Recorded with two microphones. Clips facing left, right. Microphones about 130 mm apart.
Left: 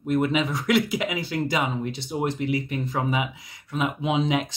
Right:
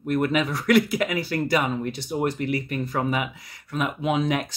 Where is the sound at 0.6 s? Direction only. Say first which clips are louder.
Right 5 dB; 50° right (ahead or behind).